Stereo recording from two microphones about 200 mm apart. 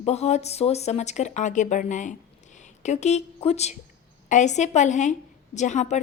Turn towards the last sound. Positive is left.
turn(degrees=35)  # may be behind; listen again after turning